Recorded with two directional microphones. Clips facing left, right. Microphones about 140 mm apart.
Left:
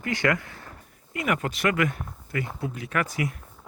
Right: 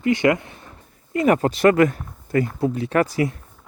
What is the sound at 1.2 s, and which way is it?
Speech, 35° right (ahead or behind).